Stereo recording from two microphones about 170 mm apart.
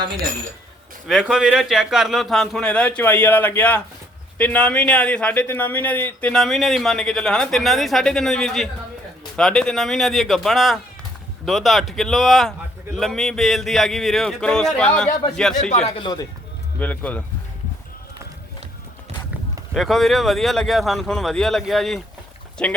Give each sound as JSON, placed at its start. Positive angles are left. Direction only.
{"t": 1.0, "sound": "a man's voice", "side_deg": -5}
{"t": 15.9, "sound": "speech", "side_deg": 25}
{"t": 16.8, "sound": "speech", "side_deg": 10}
{"t": 19.7, "sound": "a man's voice", "side_deg": 0}